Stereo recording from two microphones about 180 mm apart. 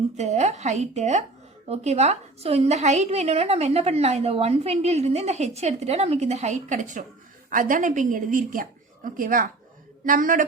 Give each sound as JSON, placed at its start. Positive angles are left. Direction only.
{"t": 0.2, "sound": "a woman's voice", "side_deg": -40}